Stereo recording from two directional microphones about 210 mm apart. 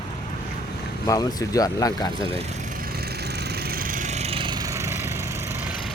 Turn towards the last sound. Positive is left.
turn(degrees=-10)  # may be behind; listen again after turning